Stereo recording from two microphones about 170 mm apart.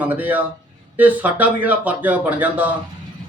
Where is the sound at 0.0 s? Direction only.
10° right (ahead or behind).